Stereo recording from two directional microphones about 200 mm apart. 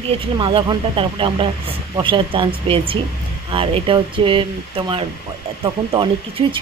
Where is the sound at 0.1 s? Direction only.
25° right (ahead or behind).